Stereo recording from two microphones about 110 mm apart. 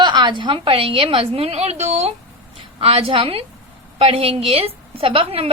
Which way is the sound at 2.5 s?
60° right (ahead or behind).